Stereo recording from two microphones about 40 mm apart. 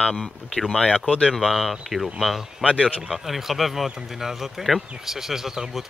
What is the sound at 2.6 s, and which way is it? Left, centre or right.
Speech, right.